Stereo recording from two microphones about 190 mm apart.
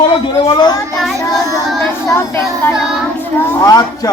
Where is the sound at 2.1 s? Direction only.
15° left (ahead or behind).